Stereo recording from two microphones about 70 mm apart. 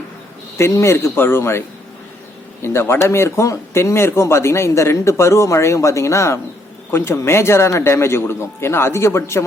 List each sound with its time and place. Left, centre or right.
0.5 s a man's voice: left